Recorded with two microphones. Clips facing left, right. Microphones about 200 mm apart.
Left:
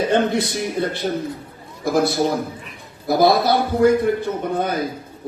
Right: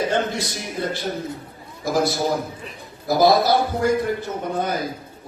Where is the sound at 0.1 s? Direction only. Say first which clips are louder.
Left 5 dB; 60° left (ahead or behind).